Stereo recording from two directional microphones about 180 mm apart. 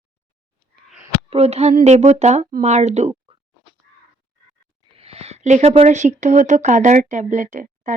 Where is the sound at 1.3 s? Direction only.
35° right (ahead or behind).